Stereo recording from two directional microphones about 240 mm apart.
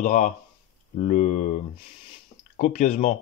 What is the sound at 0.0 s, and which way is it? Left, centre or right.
Speech, left.